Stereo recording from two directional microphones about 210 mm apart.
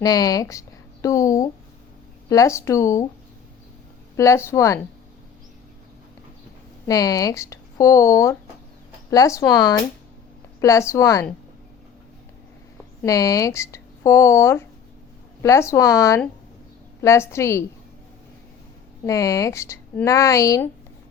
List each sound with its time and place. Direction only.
0.0 s speech: 20° left (ahead or behind)
4.2 s speech: 15° left (ahead or behind)
6.8 s speech: 15° left (ahead or behind)
13.0 s speech: 15° left (ahead or behind)
19.0 s speech: 15° left (ahead or behind)